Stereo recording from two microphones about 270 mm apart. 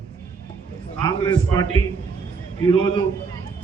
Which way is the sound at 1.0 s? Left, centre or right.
Centre.